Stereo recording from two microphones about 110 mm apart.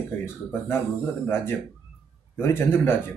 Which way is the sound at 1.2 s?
20° left (ahead or behind).